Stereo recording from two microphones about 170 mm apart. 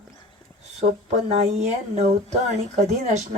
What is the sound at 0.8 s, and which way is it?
Speech, 40° right (ahead or behind).